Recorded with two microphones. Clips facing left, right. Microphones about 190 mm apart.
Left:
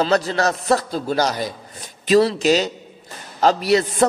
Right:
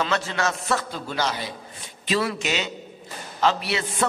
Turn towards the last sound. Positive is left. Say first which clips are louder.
# left 9 dB
turn(degrees=40)  # may be behind; listen again after turning